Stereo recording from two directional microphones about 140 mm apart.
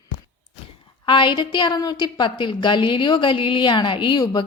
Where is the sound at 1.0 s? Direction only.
35° left (ahead or behind).